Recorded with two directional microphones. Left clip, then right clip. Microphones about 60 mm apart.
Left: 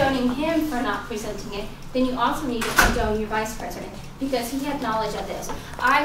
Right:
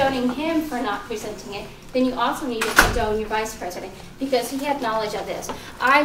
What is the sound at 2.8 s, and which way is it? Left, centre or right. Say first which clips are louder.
Speech: right 2 dB; right.